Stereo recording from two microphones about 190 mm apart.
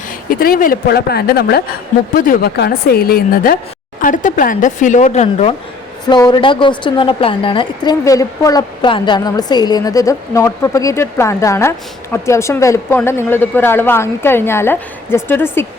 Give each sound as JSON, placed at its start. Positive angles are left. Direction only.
{"t": 0.3, "sound": "a woman's voice", "side_deg": 50}
{"t": 6.1, "sound": "a woman's voice", "side_deg": 20}